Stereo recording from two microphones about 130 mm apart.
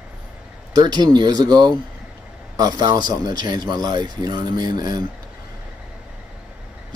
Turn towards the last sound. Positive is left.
turn(degrees=-30)  # may be behind; listen again after turning